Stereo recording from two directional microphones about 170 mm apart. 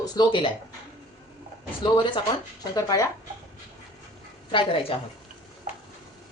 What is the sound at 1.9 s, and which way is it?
A woman's voice, 30° left (ahead or behind).